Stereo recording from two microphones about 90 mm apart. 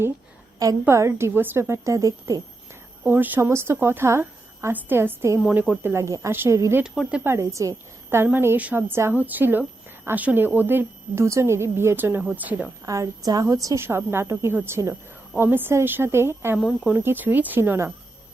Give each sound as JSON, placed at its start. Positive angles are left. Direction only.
{"t": 0.9, "sound": "a woman's voice", "side_deg": -30}
{"t": 3.0, "sound": "a woman's voice", "side_deg": -20}
{"t": 5.9, "sound": "a woman's voice", "side_deg": -30}
{"t": 6.8, "sound": "a woman's voice", "side_deg": -10}
{"t": 7.3, "sound": "a woman's voice", "side_deg": -35}
{"t": 8.2, "sound": "a woman's voice", "side_deg": -25}
{"t": 12.8, "sound": "a woman's voice", "side_deg": -40}